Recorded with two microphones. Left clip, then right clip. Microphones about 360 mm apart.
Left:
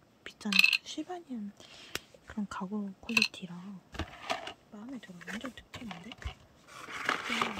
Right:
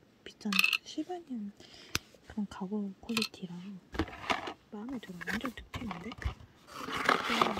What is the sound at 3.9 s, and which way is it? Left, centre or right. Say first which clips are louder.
Vehicle: right 3 dB; centre.